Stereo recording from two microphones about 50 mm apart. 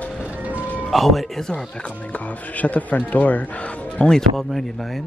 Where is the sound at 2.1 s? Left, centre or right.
Left.